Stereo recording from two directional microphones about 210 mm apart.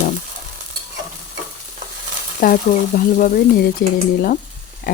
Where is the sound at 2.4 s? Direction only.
45° left (ahead or behind).